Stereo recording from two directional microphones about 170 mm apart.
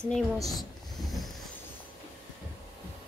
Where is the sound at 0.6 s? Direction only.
Centre (ahead or behind).